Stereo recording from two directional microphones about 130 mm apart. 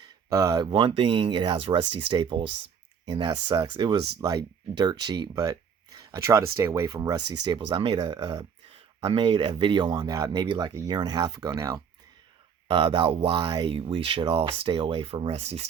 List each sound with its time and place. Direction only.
0.3 s speech: 30° right (ahead or behind)
4.2 s speech: 30° right (ahead or behind)
8.7 s speech: 50° right (ahead or behind); by 11.8 s 25° right (ahead or behind)
12.6 s speech: 40° right (ahead or behind)